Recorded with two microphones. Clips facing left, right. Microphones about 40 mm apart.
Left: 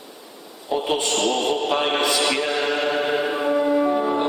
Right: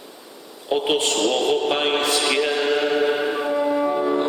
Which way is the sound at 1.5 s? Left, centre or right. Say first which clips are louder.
Right 1 dB; centre.